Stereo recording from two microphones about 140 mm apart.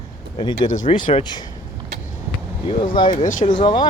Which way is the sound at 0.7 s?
65° left (ahead or behind).